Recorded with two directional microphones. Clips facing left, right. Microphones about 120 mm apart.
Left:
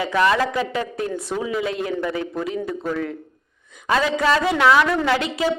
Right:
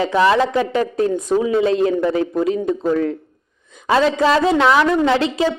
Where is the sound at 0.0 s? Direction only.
25° right (ahead or behind).